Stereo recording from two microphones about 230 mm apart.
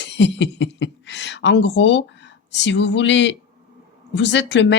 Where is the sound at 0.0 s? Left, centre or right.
Left.